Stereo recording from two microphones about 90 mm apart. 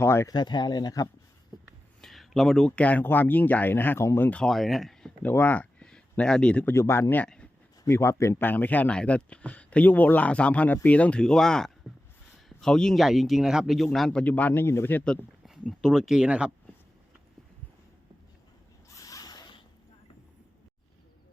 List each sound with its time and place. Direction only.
0.0 s speech: 30° left (ahead or behind)
0.3 s speech: 55° left (ahead or behind)
2.0 s speech: 5° left (ahead or behind); by 4.3 s 30° left (ahead or behind)
4.3 s speech: 10° left (ahead or behind)
5.2 s speech: 20° left (ahead or behind)
6.7 s speech: 30° left (ahead or behind)
15.4 s a sound: centre (ahead or behind)
15.8 s speech: 5° right (ahead or behind)
18.9 s a sound: 40° left (ahead or behind)